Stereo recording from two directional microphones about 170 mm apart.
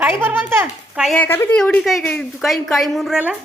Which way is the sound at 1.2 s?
15° left (ahead or behind).